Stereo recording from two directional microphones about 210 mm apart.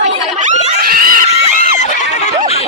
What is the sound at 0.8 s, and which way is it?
Screaming, 45° right (ahead or behind).